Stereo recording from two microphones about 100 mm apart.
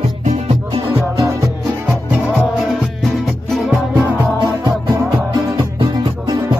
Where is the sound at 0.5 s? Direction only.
65° right (ahead or behind).